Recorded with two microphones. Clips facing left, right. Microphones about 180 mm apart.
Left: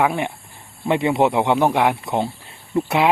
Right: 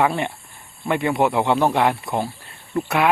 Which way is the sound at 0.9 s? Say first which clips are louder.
Left 2 dB; 20° left (ahead or behind).